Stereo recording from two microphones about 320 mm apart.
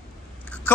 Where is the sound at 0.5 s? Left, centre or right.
Centre.